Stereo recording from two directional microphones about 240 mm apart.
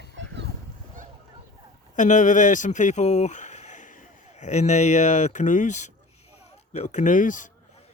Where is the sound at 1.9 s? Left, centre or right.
Left.